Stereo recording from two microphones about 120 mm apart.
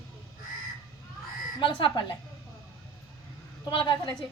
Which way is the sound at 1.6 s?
45° left (ahead or behind).